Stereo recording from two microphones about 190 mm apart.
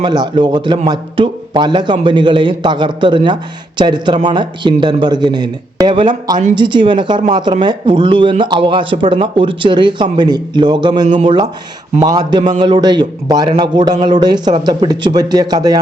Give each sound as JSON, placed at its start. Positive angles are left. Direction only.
{"t": 0.0, "sound": "a man's voice", "side_deg": -20}